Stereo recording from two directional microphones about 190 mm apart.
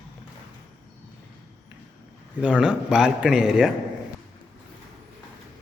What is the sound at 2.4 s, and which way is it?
Speech, 5° right (ahead or behind).